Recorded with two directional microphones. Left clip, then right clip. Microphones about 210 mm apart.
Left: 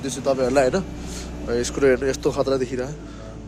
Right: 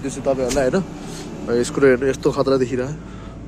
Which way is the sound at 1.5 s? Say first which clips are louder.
Right 3 dB; centre (ahead or behind).